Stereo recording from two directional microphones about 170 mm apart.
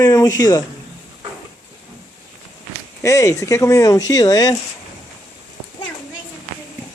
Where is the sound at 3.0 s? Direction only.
20° left (ahead or behind).